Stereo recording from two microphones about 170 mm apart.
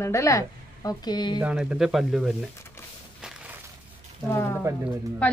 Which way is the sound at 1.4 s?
5° right (ahead or behind).